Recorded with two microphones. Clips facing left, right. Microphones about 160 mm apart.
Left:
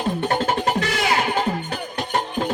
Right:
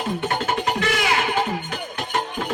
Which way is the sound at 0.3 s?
35° left (ahead or behind).